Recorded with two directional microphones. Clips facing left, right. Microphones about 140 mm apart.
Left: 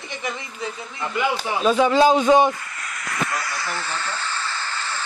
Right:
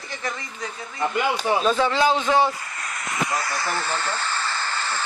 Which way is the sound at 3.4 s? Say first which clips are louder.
Right 2 dB; 35° right (ahead or behind).